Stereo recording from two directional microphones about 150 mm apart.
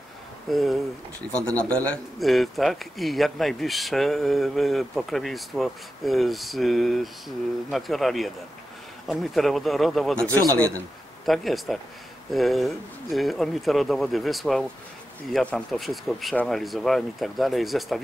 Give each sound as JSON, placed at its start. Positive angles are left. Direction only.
{"t": 0.5, "sound": "speech", "side_deg": 0}
{"t": 10.2, "sound": "a man's voice", "side_deg": -20}
{"t": 11.2, "sound": "speech", "side_deg": 0}